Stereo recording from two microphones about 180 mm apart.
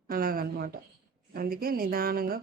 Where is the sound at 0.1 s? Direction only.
55° right (ahead or behind).